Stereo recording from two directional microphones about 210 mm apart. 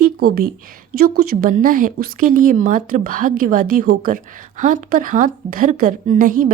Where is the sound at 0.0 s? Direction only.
45° right (ahead or behind).